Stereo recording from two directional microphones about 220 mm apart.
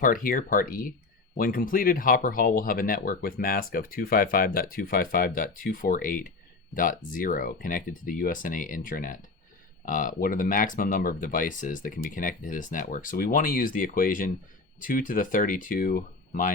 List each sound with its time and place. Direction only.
0.0 s speech: 40° left (ahead or behind)